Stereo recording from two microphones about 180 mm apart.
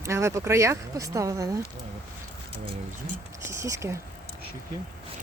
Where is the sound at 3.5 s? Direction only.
15° right (ahead or behind).